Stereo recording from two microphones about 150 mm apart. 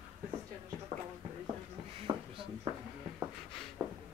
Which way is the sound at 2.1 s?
40° right (ahead or behind).